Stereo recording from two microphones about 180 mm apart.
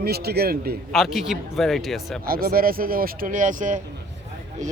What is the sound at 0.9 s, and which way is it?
Speech, centre (ahead or behind).